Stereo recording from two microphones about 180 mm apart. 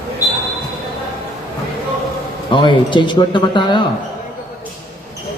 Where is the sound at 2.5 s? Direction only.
25° left (ahead or behind).